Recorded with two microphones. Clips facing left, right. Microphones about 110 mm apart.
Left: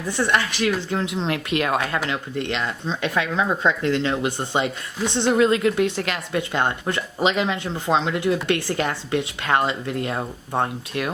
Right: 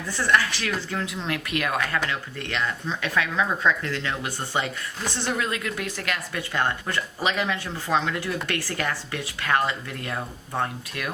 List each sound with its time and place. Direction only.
0.1 s speech: 20° left (ahead or behind)